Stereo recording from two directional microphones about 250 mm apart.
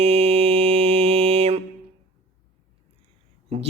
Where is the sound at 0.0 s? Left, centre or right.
Right.